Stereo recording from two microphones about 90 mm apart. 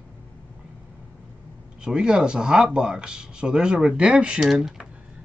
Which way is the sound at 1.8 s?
10° right (ahead or behind).